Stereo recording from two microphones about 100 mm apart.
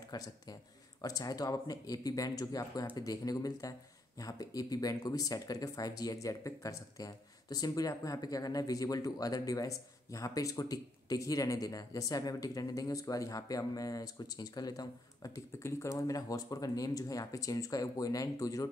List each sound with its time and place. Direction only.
0.1 s speech: 40° left (ahead or behind)